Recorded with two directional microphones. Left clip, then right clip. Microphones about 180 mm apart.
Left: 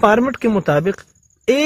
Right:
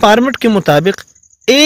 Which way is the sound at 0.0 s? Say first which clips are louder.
Right 5 dB; 45° right (ahead or behind).